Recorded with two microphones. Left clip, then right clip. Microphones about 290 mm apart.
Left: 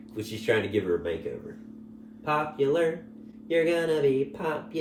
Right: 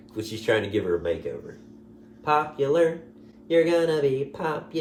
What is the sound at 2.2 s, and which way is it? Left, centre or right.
Speech, centre.